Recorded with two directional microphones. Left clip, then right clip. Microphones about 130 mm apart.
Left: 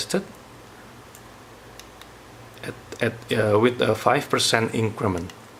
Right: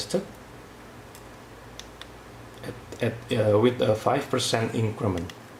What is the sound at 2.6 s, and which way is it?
Speech, 45° left (ahead or behind).